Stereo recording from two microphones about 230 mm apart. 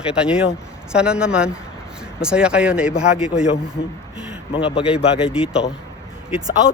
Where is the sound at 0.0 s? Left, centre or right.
Centre.